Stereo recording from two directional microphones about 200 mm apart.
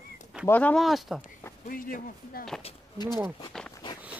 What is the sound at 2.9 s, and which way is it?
Speech, 20° left (ahead or behind).